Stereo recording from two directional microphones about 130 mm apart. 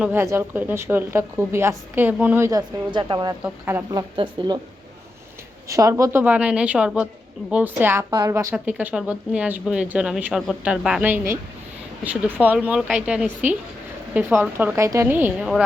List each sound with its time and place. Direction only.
0.0 s a woman's voice: 15° right (ahead or behind)
2.5 s speech: 35° right (ahead or behind)
3.4 s a woman's voice: 15° right (ahead or behind)
3.9 s speech: 35° right (ahead or behind)
5.6 s a woman's voice: 25° right (ahead or behind)